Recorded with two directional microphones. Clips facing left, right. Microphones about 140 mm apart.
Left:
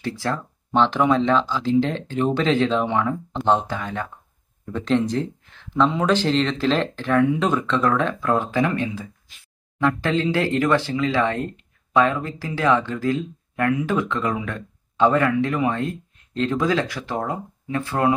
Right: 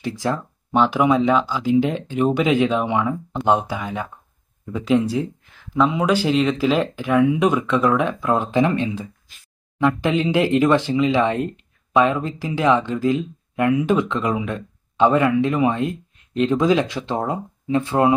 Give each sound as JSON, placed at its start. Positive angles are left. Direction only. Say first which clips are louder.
{"t": 0.0, "sound": "speech", "louder": "right 2 dB", "side_deg": -15}